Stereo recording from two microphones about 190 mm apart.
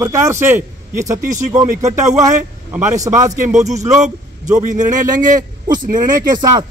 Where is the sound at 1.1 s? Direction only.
40° right (ahead or behind).